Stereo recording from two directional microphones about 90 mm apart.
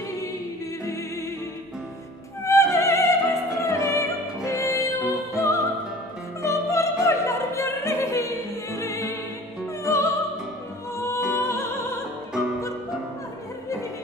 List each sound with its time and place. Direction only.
2.4 s music: 30° left (ahead or behind)
6.4 s opera: 35° left (ahead or behind)
9.8 s music: 35° left (ahead or behind)